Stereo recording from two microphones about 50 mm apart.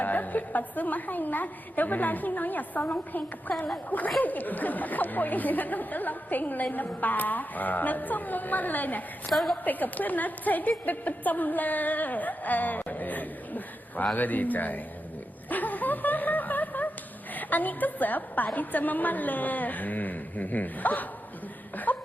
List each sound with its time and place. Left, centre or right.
0.0 s speech: left
9.3 s a woman's voice: centre
9.6 s speech: left
15.4 s a sound: left
17.3 s speech: left
21.9 s chuckle: left